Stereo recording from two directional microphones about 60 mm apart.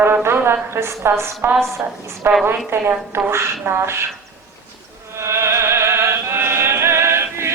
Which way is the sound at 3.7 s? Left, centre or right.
Right.